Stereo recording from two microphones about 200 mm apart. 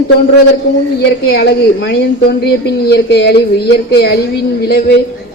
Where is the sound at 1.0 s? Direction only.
55° left (ahead or behind).